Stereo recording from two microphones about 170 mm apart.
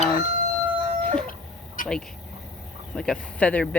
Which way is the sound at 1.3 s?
55° left (ahead or behind).